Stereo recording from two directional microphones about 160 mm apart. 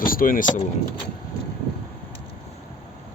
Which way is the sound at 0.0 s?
60° left (ahead or behind).